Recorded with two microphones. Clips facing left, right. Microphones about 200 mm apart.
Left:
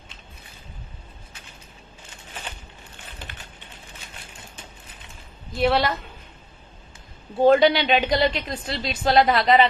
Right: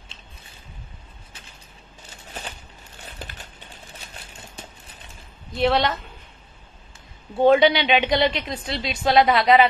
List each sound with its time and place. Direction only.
2.0 s a sound: 40° right (ahead or behind)
3.1 s typewriter: 40° right (ahead or behind)
5.5 s a woman's voice: centre (ahead or behind)
7.4 s a woman's voice: centre (ahead or behind)